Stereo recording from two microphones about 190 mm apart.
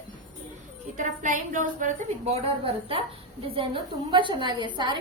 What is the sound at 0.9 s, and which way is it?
A woman's voice, 40° right (ahead or behind).